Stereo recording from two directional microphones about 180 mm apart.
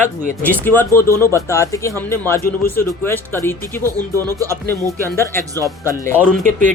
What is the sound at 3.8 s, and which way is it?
Speech, 15° right (ahead or behind).